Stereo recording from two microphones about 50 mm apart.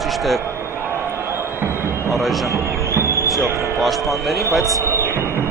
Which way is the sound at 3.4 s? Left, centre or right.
Right.